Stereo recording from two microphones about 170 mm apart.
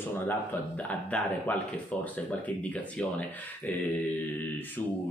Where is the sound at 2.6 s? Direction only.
10° left (ahead or behind).